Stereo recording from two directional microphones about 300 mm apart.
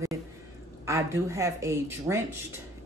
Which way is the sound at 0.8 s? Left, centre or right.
Centre.